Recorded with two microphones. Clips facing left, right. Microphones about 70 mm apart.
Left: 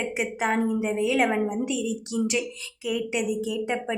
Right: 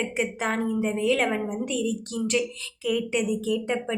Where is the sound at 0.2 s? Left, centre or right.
Centre.